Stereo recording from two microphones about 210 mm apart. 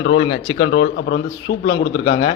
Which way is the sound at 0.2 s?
25° left (ahead or behind).